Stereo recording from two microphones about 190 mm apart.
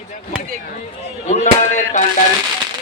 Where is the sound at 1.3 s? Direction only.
40° left (ahead or behind).